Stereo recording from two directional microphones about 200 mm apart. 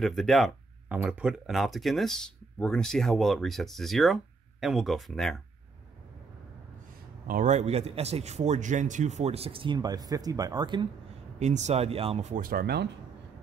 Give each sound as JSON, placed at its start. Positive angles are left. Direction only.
{"t": 0.0, "sound": "speech", "side_deg": 0}
{"t": 7.2, "sound": "a man's voice", "side_deg": -40}
{"t": 11.3, "sound": "a man's voice", "side_deg": -35}